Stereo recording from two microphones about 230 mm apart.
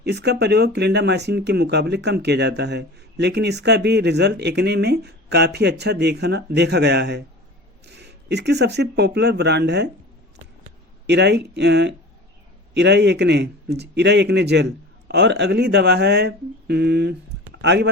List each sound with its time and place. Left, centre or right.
0.0 s speech: right
11.0 s speech: right